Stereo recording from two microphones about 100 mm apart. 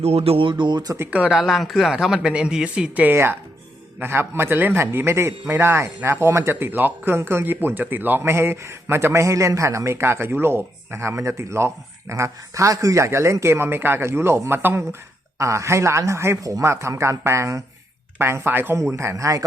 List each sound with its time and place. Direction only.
0.0 s speech: 90° right; by 0.9 s 45° right (ahead or behind)
1.1 s a man's voice: 10° right (ahead or behind); by 19.5 s 35° right (ahead or behind)